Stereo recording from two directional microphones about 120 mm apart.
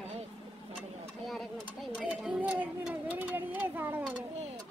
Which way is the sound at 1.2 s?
Centre (ahead or behind).